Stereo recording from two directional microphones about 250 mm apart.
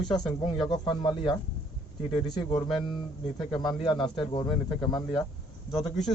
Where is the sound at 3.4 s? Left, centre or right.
Centre.